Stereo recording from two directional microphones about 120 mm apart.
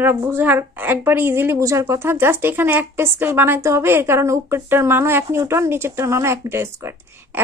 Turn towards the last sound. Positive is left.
turn(degrees=-20)  # may be behind; listen again after turning